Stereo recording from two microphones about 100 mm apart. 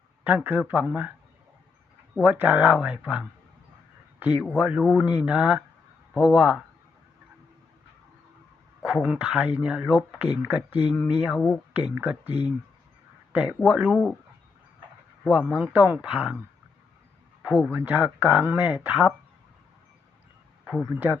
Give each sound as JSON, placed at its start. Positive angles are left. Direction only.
{"t": 0.3, "sound": "speech", "side_deg": -15}
{"t": 2.1, "sound": "speech", "side_deg": -15}
{"t": 4.5, "sound": "speech", "side_deg": -10}
{"t": 8.8, "sound": "speech", "side_deg": -10}
{"t": 13.3, "sound": "speech", "side_deg": -15}
{"t": 13.9, "sound": "speech", "side_deg": 10}
{"t": 15.2, "sound": "speech", "side_deg": -5}
{"t": 17.4, "sound": "speech", "side_deg": -10}
{"t": 20.9, "sound": "speech", "side_deg": -20}